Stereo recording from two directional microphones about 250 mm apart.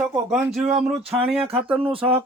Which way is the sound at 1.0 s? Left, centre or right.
Right.